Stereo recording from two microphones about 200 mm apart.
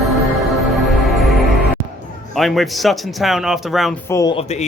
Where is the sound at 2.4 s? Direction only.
Centre (ahead or behind).